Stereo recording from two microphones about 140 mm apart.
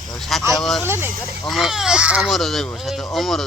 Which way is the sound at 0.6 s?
5° left (ahead or behind).